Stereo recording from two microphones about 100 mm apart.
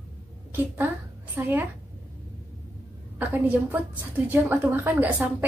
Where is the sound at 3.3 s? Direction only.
15° right (ahead or behind).